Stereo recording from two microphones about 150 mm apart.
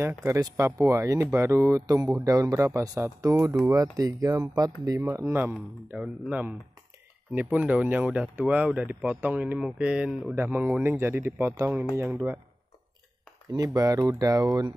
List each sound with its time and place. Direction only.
0.0 s speech: 20° right (ahead or behind)
13.5 s speech: 25° right (ahead or behind)